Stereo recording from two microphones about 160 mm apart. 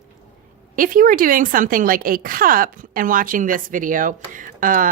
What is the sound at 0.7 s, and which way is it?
Speech, 60° right (ahead or behind).